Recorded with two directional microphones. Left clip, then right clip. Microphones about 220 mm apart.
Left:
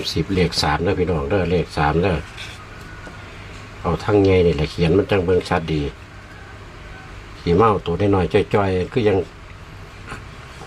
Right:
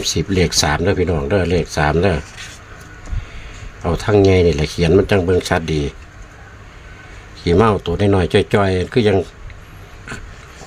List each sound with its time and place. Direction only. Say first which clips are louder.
0.0 s speech: right 3 dB; 35° right (ahead or behind)
3.8 s speech: right 3 dB; 35° right (ahead or behind)
7.4 s speech: right 2 dB; 35° right (ahead or behind)